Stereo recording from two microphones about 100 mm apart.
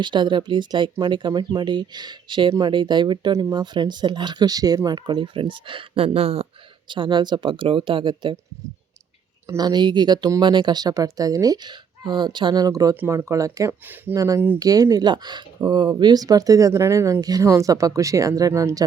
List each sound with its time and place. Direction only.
0.0 s speech: 50° right (ahead or behind); by 6.5 s 80° right
6.8 s speech: 50° right (ahead or behind)
9.6 s speech: 45° right (ahead or behind)
12.6 s speech: 35° right (ahead or behind)
13.8 s speech: 20° right (ahead or behind)
14.2 s speech: 35° right (ahead or behind)